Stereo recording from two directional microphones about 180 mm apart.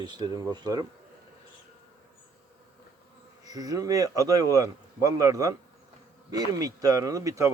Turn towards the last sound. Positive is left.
turn(degrees=-20)  # may be behind; listen again after turning